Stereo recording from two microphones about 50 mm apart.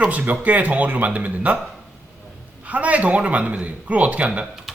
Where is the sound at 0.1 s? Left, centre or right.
Right.